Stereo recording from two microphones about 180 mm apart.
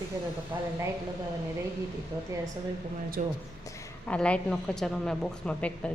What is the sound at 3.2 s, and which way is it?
Speech, 50° right (ahead or behind).